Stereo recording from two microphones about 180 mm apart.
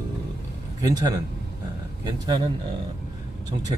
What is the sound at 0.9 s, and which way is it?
Speech, 20° right (ahead or behind).